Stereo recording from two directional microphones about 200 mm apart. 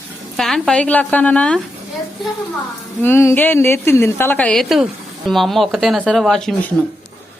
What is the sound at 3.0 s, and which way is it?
A woman's voice, 10° left (ahead or behind).